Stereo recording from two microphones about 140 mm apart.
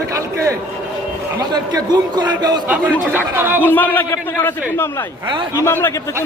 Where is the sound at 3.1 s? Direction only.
15° right (ahead or behind).